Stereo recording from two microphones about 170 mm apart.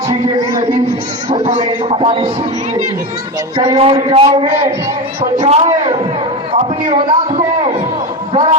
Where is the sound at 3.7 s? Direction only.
35° right (ahead or behind).